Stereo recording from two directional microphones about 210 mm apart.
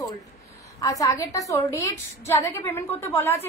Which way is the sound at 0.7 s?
15° left (ahead or behind).